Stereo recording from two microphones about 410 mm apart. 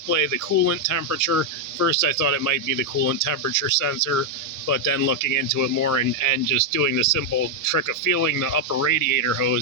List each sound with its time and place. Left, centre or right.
0.1 s speech: left